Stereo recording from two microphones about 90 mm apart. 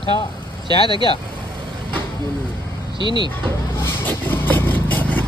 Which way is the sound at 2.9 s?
60° right (ahead or behind).